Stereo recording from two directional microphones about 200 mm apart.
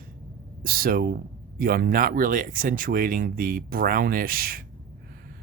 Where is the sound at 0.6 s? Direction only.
45° right (ahead or behind).